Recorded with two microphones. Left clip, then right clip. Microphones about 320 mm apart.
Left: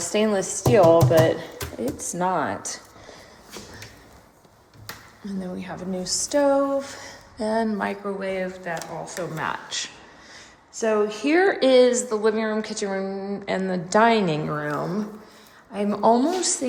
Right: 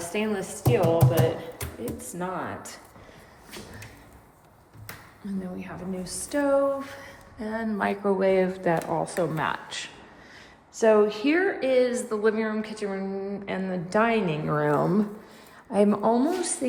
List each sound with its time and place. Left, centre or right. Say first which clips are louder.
0.0 s a woman's voice: left 7 dB; centre
5.2 s a woman's voice: left 3 dB; centre
8.0 s a woman's voice: right 5 dB; centre
14.5 s a woman's voice: right 3 dB; centre